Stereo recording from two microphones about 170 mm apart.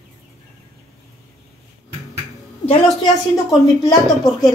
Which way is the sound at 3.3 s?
20° left (ahead or behind).